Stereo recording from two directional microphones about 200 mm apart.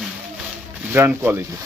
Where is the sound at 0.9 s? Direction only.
10° right (ahead or behind).